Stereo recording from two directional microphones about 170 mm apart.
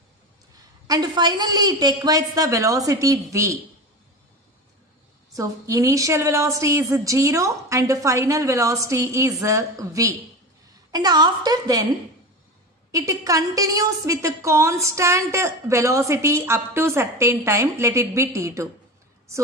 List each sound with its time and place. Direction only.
0.8 s a woman's voice: 25° right (ahead or behind)
5.3 s a woman's voice: 20° right (ahead or behind)
12.9 s a woman's voice: 20° right (ahead or behind)